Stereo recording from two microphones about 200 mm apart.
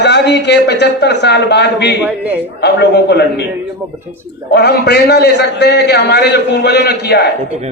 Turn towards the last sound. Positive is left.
turn(degrees=55)  # may be behind; listen again after turning